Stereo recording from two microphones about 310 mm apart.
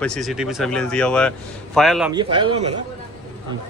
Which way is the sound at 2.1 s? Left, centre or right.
Centre.